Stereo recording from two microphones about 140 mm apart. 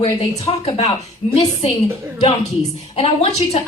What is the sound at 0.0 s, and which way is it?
A woman's voice, 50° left (ahead or behind).